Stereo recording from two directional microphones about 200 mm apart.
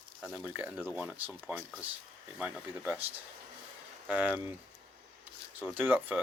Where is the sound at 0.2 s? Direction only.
10° right (ahead or behind).